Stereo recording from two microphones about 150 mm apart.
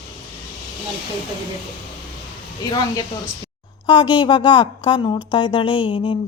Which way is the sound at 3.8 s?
35° left (ahead or behind).